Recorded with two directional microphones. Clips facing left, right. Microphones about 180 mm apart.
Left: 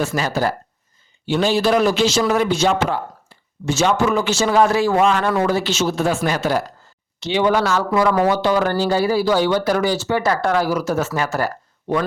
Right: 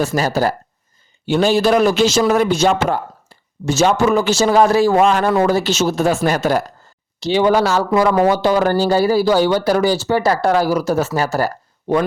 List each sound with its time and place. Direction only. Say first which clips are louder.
0.0 s a man's voice: right 3 dB; 40° right (ahead or behind)